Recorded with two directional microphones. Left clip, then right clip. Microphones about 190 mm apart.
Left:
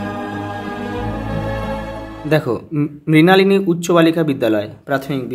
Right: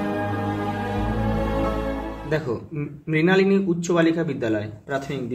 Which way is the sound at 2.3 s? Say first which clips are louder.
Left 10 dB; 50° left (ahead or behind).